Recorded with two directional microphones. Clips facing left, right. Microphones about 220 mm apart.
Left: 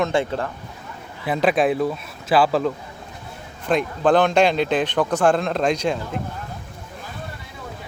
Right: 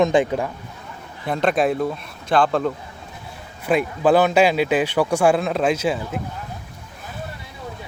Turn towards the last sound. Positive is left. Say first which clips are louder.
# right 1 dB
turn(degrees=-5)  # may be behind; listen again after turning